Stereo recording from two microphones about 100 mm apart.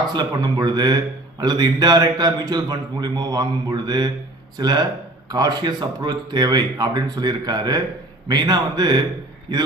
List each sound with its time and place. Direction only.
0.1 s a man's voice: 45° right (ahead or behind)